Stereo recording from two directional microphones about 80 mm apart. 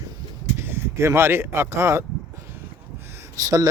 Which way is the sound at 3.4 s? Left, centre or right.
Right.